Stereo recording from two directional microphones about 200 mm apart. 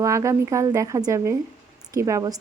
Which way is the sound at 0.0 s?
15° right (ahead or behind).